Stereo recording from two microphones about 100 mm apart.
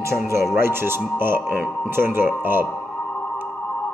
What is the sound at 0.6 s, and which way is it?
Speech, 25° right (ahead or behind).